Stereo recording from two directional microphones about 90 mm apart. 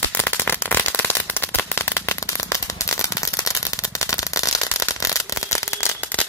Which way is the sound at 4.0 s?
40° left (ahead or behind).